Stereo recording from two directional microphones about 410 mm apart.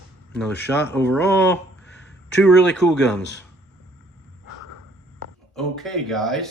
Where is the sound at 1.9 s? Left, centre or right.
Left.